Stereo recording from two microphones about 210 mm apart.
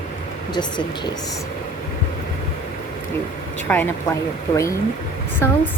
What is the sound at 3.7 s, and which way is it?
Speech, 10° left (ahead or behind).